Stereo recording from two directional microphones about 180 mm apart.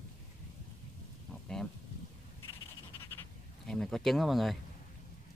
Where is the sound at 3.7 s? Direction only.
Centre (ahead or behind).